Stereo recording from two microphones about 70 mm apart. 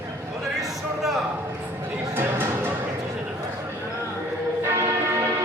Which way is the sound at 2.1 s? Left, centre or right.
Right.